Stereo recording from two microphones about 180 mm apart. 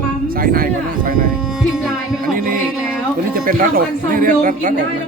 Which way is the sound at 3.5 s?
50° right (ahead or behind).